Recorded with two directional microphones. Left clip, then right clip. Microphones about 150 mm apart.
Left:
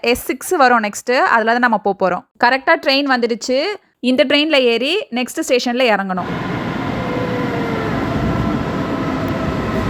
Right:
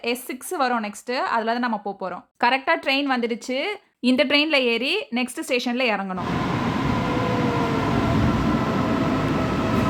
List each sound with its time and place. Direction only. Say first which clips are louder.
0.0 s speech: left 10 dB; 45° left (ahead or behind)
2.4 s speech: left 6 dB; 35° left (ahead or behind)